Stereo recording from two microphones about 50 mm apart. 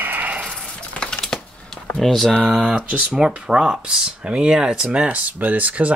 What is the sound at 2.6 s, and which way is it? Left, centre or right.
Speech, right.